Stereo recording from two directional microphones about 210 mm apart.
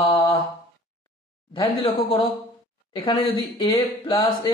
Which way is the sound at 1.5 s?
25° left (ahead or behind).